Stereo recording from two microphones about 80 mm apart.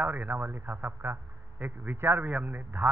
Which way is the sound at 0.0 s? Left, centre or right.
Right.